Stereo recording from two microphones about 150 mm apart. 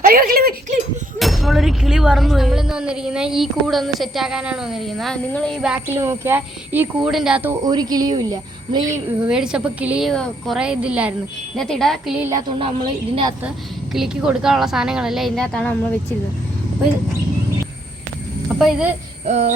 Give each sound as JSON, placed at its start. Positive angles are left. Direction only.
{"t": 0.0, "sound": "speech", "side_deg": -75}
{"t": 1.2, "sound": "speech", "side_deg": 0}
{"t": 5.6, "sound": "speech", "side_deg": -10}
{"t": 7.6, "sound": "speech", "side_deg": -25}
{"t": 8.9, "sound": "speech", "side_deg": -10}
{"t": 11.5, "sound": "speech", "side_deg": 5}
{"t": 12.5, "sound": "a woman's voice", "side_deg": -35}
{"t": 13.9, "sound": "speech", "side_deg": -5}
{"t": 18.4, "sound": "speech", "side_deg": -10}
{"t": 19.2, "sound": "a sound", "side_deg": -50}